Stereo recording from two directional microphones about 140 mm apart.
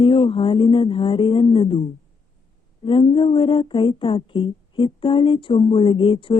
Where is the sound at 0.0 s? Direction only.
40° left (ahead or behind).